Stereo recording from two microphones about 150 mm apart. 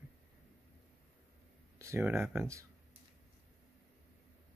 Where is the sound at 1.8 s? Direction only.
20° right (ahead or behind).